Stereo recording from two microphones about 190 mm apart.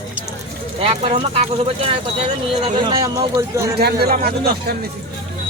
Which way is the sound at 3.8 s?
55° right (ahead or behind).